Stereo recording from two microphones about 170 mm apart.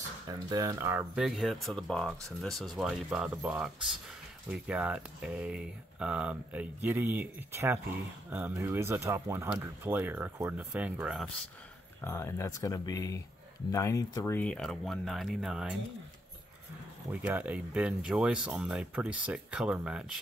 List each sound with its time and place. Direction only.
0.3 s speech: 20° right (ahead or behind)
1.1 s speech: centre (ahead or behind)
12.0 s speech: 15° left (ahead or behind); by 15.8 s 5° right (ahead or behind)
17.1 s speech: 10° right (ahead or behind)